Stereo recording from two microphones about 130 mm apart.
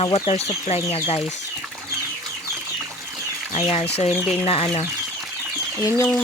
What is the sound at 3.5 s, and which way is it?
Speech, 50° left (ahead or behind).